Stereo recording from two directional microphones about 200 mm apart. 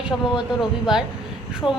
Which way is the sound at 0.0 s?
5° right (ahead or behind).